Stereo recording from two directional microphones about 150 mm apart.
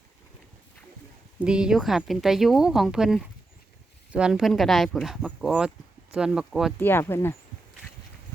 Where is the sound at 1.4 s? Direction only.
5° right (ahead or behind).